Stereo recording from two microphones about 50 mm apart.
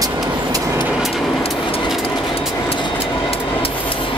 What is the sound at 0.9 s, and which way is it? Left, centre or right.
Train, centre.